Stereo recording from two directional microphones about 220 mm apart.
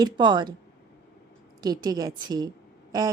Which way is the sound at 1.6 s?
15° right (ahead or behind).